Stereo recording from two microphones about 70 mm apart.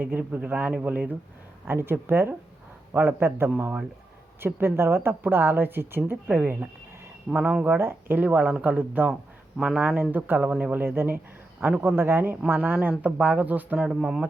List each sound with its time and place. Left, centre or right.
0.0 s speech: right
7.8 s speech: right; by 9.8 s centre
9.8 s speech: right
13.7 s speech: centre